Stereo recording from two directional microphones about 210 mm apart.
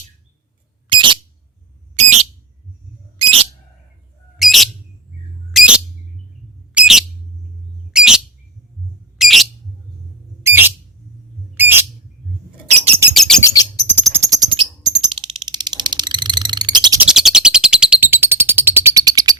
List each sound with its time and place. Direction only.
0.9 s alarm: 20° right (ahead or behind)
2.0 s squawk: 35° right (ahead or behind)
4.4 s a sound: centre (ahead or behind)
5.5 s bird: 5° right (ahead or behind)
6.7 s squawk: centre (ahead or behind)
7.9 s bird: 5° right (ahead or behind)
9.1 s alarm: centre (ahead or behind)
12.6 s bird: 30° right (ahead or behind)
13.1 s bird: centre (ahead or behind)
13.4 s bird: 15° left (ahead or behind)
14.1 s bird: 15° right (ahead or behind)
15.4 s frog: 20° right (ahead or behind)
17.0 s bird: centre (ahead or behind); by 19.4 s 15° right (ahead or behind)